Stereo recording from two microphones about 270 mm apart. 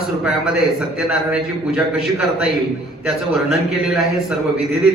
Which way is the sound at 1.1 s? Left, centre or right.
Centre.